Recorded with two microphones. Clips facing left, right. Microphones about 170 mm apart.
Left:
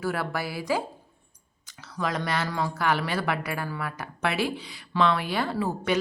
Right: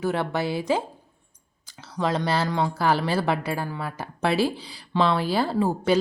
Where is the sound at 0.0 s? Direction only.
25° right (ahead or behind).